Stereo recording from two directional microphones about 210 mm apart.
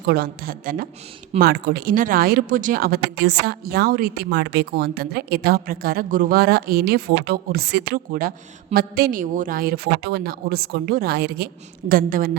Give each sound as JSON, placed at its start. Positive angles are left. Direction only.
{"t": 0.1, "sound": "speech", "side_deg": -45}